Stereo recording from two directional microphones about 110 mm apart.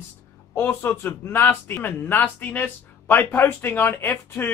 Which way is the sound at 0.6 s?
20° left (ahead or behind).